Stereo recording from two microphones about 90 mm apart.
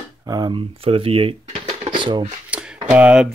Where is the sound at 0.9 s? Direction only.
90° right.